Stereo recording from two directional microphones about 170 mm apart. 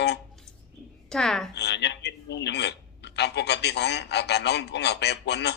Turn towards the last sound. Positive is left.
turn(degrees=80)